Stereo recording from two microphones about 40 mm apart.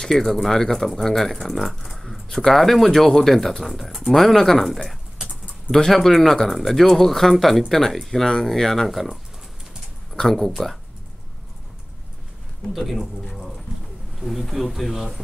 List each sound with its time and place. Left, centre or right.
0.0 s speech: centre
5.2 s typing: centre
5.8 s speech: centre
10.2 s speech: centre
12.7 s speech: centre
14.4 s speech: centre